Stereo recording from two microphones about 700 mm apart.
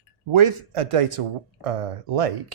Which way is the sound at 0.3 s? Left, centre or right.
Right.